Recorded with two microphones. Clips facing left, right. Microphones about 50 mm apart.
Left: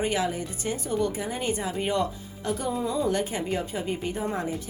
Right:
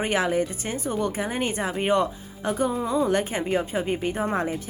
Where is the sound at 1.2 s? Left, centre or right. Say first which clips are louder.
Right 3 dB; right.